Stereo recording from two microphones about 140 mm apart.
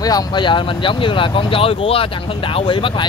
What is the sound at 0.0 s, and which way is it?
Speech, 25° left (ahead or behind).